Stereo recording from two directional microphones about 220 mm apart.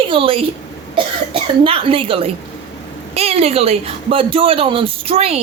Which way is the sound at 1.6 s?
25° right (ahead or behind).